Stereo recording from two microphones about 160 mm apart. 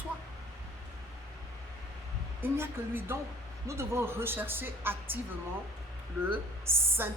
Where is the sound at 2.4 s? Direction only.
15° right (ahead or behind).